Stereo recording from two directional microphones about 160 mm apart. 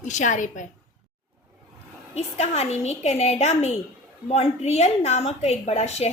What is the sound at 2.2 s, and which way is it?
A woman's voice, 40° left (ahead or behind).